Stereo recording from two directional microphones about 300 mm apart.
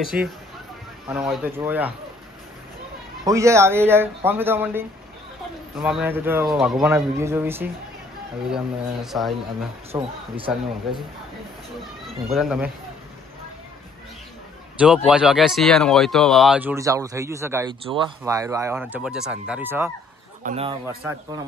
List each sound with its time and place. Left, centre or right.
0.1 s speech: centre
3.3 s speech: centre
9.9 s speech: centre
12.3 s speech: centre
14.8 s speech: centre
20.4 s a man's voice: centre